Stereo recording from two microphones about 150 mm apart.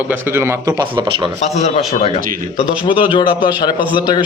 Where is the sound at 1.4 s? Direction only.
50° left (ahead or behind).